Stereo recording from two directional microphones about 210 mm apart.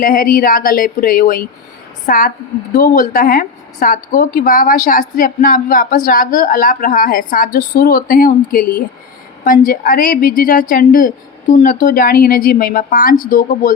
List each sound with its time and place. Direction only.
0.0 s a woman's voice: 40° left (ahead or behind)